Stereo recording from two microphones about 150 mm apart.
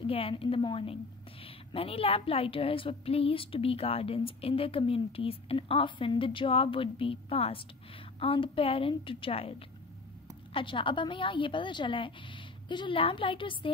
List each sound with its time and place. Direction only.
0.0 s a woman's voice: 40° left (ahead or behind)